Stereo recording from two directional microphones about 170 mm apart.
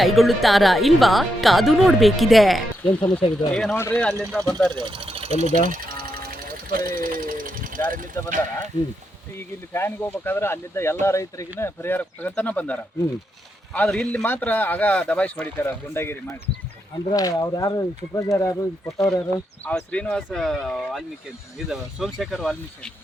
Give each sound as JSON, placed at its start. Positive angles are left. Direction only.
{"t": 0.0, "sound": "speech", "side_deg": 0}
{"t": 3.0, "sound": "speech", "side_deg": 25}
{"t": 3.5, "sound": "speech", "side_deg": 5}
{"t": 4.7, "sound": "speech", "side_deg": -25}
{"t": 5.6, "sound": "sewing machine", "side_deg": -55}
{"t": 8.1, "sound": "speech", "side_deg": 15}
{"t": 9.4, "sound": "speech", "side_deg": 15}
{"t": 19.6, "sound": "speech", "side_deg": 5}